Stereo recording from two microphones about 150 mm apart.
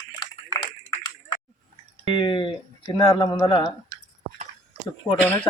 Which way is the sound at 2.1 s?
35° left (ahead or behind).